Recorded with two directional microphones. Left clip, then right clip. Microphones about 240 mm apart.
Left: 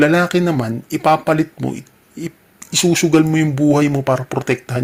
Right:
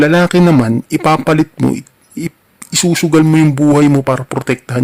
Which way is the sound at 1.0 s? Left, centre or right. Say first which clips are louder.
Right 2 dB; right.